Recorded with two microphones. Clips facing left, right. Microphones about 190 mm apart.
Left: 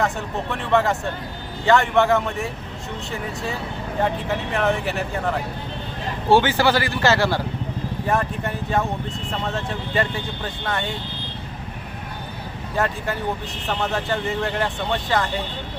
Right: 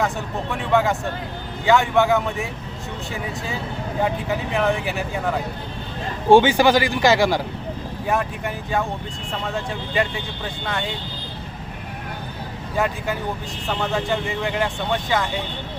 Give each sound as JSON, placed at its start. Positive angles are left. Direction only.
{"t": 0.5, "sound": "speech", "side_deg": 0}
{"t": 4.0, "sound": "speech", "side_deg": 0}
{"t": 6.3, "sound": "speech", "side_deg": -15}
{"t": 8.0, "sound": "speech", "side_deg": 0}
{"t": 12.7, "sound": "speech", "side_deg": 0}